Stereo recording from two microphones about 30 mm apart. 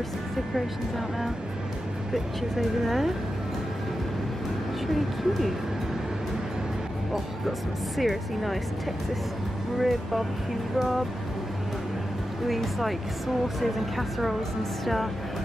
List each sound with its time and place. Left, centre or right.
2.1 s speech: centre
4.8 s speech: centre
8.0 s speech: centre
9.8 s speech: centre
12.4 s speech: centre